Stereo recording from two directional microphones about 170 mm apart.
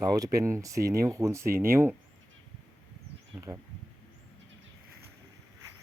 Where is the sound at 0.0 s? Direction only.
20° right (ahead or behind).